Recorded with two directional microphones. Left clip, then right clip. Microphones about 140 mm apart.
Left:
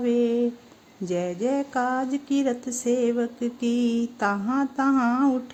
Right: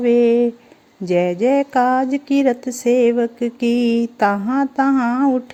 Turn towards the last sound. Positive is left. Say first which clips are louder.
# right 6 dB
turn(degrees=-30)  # may be behind; listen again after turning